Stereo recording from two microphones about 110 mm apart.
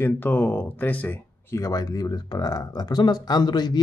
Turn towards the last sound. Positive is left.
turn(degrees=40)  # may be behind; listen again after turning